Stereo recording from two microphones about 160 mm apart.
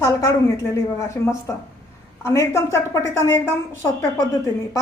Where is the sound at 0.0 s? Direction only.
20° left (ahead or behind).